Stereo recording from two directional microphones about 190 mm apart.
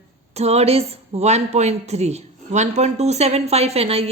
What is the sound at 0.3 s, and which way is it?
A woman's voice, 35° right (ahead or behind).